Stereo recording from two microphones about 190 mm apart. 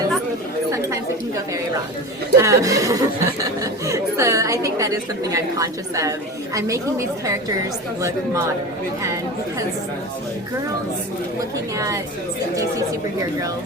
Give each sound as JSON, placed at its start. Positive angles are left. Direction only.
{"t": 2.4, "sound": "a woman's voice", "side_deg": -15}